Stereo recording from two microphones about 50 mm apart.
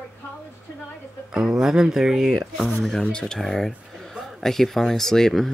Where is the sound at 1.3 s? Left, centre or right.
Centre.